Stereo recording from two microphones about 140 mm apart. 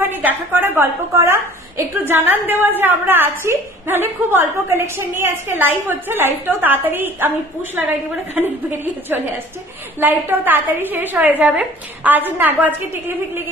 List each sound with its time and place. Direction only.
0.0 s a woman's voice: 15° right (ahead or behind)